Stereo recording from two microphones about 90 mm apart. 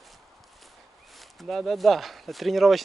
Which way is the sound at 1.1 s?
Centre (ahead or behind).